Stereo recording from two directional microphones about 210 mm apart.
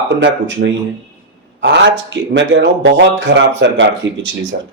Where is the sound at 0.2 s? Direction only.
55° right (ahead or behind).